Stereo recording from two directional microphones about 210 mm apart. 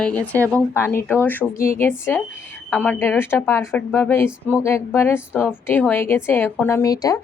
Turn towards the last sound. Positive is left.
turn(degrees=15)  # may be behind; listen again after turning